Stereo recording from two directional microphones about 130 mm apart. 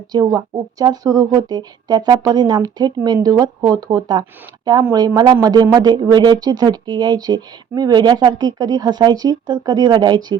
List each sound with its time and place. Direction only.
0.1 s speech: 30° right (ahead or behind)